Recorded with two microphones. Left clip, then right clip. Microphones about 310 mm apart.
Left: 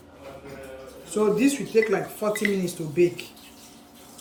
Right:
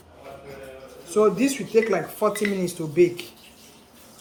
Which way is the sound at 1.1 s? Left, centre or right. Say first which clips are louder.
Right 2 dB; centre.